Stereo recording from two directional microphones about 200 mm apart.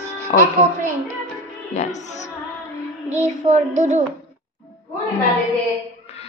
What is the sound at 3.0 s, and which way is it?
Child singing, 35° right (ahead or behind).